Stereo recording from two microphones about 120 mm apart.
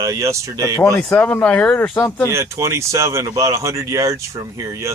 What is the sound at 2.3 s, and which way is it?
Speech, 25° right (ahead or behind).